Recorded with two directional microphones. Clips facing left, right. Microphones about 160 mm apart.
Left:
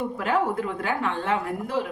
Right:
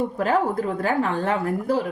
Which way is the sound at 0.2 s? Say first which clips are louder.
Right 2 dB; 40° right (ahead or behind).